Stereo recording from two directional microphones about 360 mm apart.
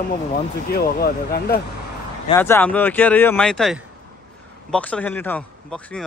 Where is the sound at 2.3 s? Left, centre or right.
Centre.